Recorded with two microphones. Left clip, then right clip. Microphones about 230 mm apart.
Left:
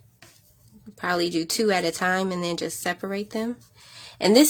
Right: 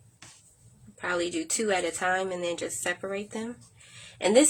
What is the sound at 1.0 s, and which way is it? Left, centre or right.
Speech, left.